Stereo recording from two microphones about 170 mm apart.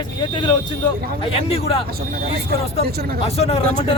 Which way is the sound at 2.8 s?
65° right (ahead or behind).